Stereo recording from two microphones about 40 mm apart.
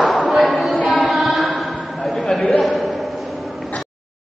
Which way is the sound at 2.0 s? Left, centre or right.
Centre.